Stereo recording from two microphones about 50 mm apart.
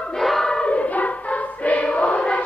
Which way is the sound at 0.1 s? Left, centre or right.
Centre.